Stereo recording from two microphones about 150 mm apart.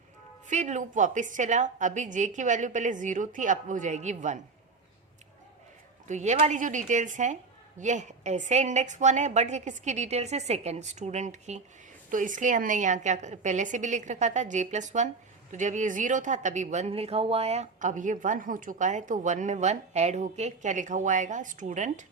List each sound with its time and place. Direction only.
0.4 s speech: 50° right (ahead or behind)
6.1 s a woman's voice: 50° right (ahead or behind)